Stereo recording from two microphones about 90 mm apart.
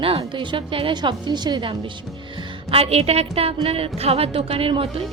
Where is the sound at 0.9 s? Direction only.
55° right (ahead or behind).